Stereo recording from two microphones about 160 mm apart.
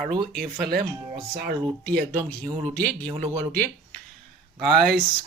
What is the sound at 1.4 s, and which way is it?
Speech, 80° right.